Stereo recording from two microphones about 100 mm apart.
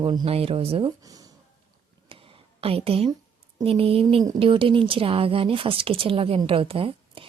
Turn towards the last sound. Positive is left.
turn(degrees=-65)  # may be behind; listen again after turning